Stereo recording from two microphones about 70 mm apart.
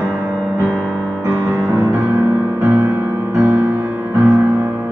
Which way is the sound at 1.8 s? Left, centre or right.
Right.